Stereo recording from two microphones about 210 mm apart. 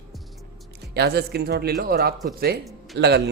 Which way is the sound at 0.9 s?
50° right (ahead or behind).